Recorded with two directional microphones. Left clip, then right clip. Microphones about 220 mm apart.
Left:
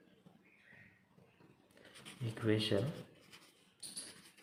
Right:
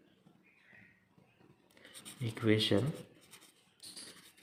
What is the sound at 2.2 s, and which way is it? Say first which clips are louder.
Speech: right 5 dB; 50° right (ahead or behind).